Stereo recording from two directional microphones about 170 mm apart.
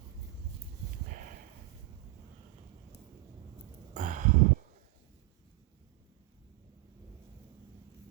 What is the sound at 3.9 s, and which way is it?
Sigh, 50° right (ahead or behind).